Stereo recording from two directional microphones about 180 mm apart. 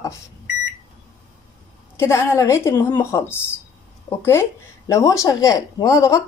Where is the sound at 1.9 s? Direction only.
15° left (ahead or behind).